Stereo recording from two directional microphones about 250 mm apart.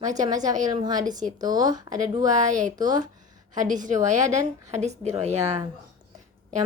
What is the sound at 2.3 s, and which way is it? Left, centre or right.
Speech, right.